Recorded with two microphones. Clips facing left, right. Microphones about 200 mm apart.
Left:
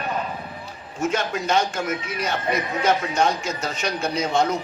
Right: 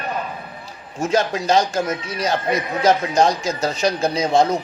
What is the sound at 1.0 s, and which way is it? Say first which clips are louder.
A man's voice: right 4 dB; 35° right (ahead or behind).